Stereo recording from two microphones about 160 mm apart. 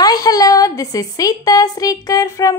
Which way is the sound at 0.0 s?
25° left (ahead or behind).